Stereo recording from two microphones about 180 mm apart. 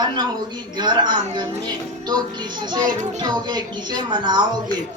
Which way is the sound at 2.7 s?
25° right (ahead or behind).